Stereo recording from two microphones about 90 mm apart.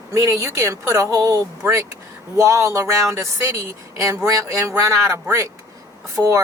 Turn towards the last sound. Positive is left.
turn(degrees=-40)  # may be behind; listen again after turning